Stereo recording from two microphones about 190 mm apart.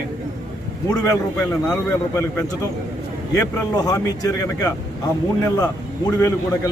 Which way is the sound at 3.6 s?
20° left (ahead or behind).